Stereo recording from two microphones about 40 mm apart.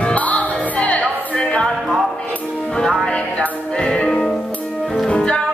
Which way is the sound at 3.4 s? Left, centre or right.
Left.